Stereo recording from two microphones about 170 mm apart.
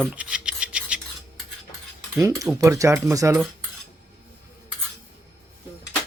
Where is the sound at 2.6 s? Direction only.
20° right (ahead or behind).